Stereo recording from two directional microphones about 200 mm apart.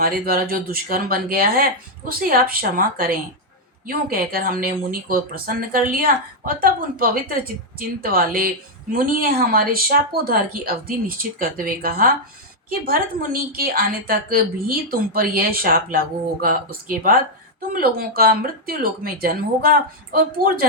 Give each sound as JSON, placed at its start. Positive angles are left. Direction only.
{"t": 0.0, "sound": "a woman's voice", "side_deg": -50}
{"t": 13.6, "sound": "a woman's voice", "side_deg": -50}